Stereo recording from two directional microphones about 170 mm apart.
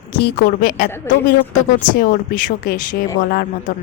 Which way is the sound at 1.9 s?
55° left (ahead or behind).